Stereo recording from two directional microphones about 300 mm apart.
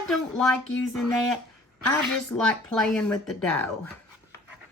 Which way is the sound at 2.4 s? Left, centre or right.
Centre.